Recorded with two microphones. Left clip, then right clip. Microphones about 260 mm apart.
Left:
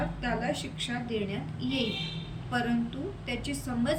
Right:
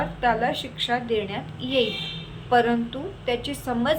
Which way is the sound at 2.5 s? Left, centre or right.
Centre.